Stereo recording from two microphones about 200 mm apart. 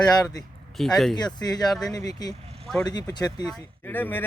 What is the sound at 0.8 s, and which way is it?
Speech, centre (ahead or behind).